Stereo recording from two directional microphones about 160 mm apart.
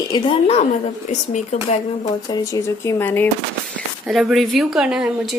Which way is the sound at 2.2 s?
25° left (ahead or behind).